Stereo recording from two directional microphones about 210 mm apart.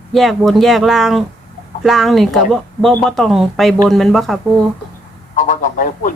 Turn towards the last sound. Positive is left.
turn(degrees=40)  # may be behind; listen again after turning